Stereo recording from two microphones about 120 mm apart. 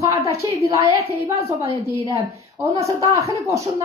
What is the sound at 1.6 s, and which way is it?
Speech, 50° right (ahead or behind).